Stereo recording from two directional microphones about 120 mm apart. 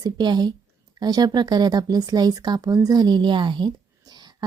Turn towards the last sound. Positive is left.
turn(degrees=-35)  # may be behind; listen again after turning